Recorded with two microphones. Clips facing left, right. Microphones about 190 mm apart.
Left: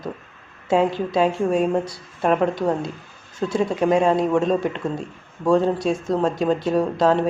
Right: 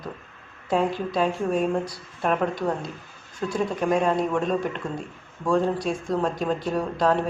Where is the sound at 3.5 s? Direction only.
25° left (ahead or behind).